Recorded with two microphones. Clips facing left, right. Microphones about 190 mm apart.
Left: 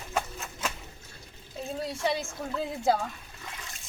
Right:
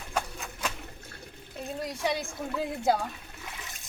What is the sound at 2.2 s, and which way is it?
Speech, 15° right (ahead or behind).